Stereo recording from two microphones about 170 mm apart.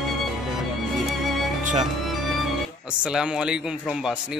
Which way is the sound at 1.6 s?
45° right (ahead or behind).